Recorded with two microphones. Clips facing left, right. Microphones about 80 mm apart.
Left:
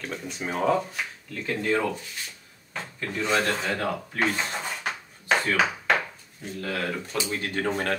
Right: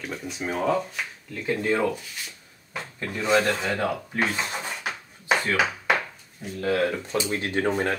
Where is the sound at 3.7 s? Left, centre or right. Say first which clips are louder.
Right 2 dB; centre.